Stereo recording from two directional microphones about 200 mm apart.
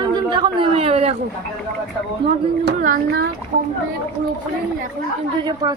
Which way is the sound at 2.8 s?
45° right (ahead or behind).